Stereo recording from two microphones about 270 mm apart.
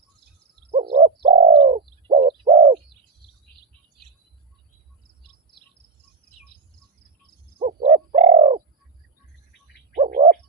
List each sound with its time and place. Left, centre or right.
0.7 s bird: right
7.6 s bird: right
10.0 s bird: right